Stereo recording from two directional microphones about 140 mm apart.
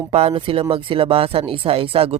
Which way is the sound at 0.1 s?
45° right (ahead or behind).